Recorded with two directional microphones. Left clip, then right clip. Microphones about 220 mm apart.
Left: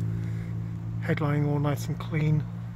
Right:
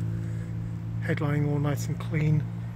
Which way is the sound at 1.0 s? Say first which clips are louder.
Left 1 dB; 15° left (ahead or behind).